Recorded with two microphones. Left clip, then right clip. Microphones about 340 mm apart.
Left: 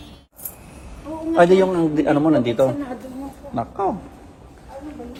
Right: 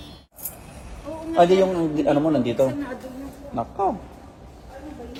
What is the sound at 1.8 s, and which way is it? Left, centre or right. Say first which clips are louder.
Speech: left 2 dB; left.